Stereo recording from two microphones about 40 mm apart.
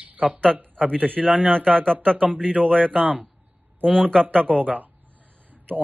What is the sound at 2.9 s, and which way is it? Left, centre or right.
Speech, right.